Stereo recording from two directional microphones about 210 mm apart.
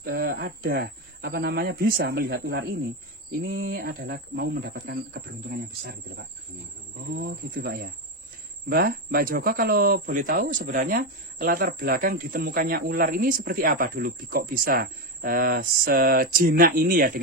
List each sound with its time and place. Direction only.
0.0 s speech: 45° right (ahead or behind)